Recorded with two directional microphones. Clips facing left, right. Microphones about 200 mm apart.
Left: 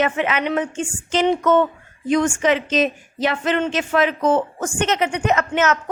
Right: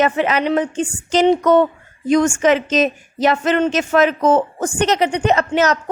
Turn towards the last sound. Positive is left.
turn(degrees=-35)  # may be behind; listen again after turning